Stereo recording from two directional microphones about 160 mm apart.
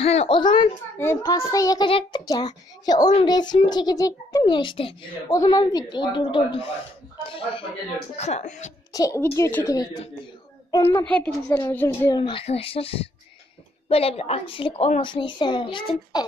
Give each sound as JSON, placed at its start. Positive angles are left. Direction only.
{"t": 0.0, "sound": "a woman's voice", "side_deg": 40}
{"t": 0.4, "sound": "a child's voice", "side_deg": 30}
{"t": 0.9, "sound": "a child's voice", "side_deg": 15}
{"t": 1.9, "sound": "a woman's voice", "side_deg": 35}
{"t": 8.2, "sound": "speech", "side_deg": 45}
{"t": 8.9, "sound": "a child's voice", "side_deg": 20}
{"t": 11.1, "sound": "a woman's voice", "side_deg": 10}
{"t": 12.1, "sound": "a woman's voice", "side_deg": 30}